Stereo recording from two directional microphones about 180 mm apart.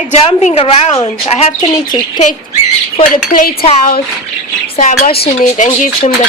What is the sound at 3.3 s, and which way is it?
Speech, 50° left (ahead or behind).